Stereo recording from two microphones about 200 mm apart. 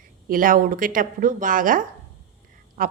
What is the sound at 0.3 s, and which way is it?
Speech, 45° right (ahead or behind).